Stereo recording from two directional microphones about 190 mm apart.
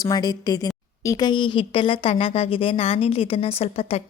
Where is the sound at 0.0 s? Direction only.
20° left (ahead or behind).